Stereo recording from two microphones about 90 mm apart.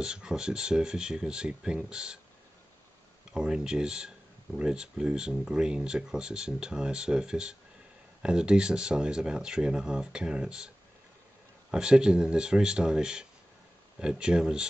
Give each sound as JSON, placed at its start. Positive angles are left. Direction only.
{"t": 0.0, "sound": "speech", "side_deg": -10}
{"t": 3.3, "sound": "speech", "side_deg": -10}
{"t": 11.7, "sound": "speech", "side_deg": -10}